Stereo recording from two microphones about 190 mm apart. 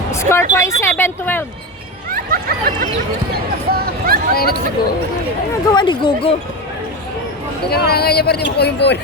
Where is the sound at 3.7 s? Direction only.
50° right (ahead or behind).